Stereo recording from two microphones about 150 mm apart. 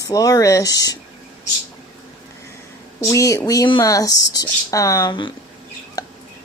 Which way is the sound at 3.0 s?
20° left (ahead or behind).